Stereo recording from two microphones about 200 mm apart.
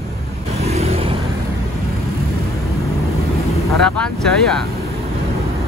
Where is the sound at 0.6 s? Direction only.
30° right (ahead or behind).